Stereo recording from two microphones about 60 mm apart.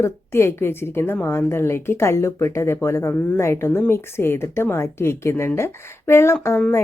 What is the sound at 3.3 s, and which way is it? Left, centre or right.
Speech, left.